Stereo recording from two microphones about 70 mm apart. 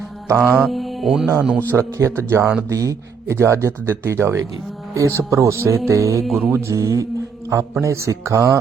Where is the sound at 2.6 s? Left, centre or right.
Right.